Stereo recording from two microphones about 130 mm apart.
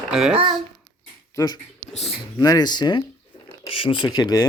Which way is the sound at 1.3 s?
30° left (ahead or behind).